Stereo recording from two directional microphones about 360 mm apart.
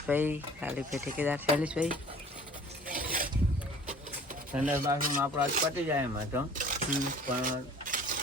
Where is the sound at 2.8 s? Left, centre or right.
Right.